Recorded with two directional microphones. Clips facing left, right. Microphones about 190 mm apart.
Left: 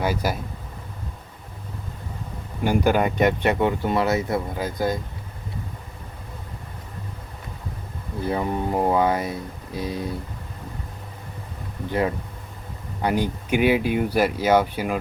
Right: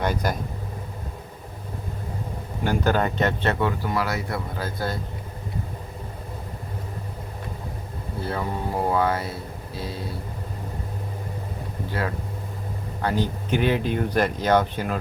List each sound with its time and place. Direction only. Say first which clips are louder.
0.0 s speech: left 1 dB; 5° left (ahead or behind)
2.6 s speech: left 3 dB; 10° left (ahead or behind)
8.2 s speech: left 4 dB; 15° left (ahead or behind)
11.9 s speech: left 6 dB; 20° left (ahead or behind)